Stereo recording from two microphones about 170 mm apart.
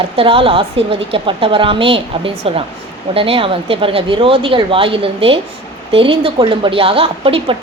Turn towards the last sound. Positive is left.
turn(degrees=-30)  # may be behind; listen again after turning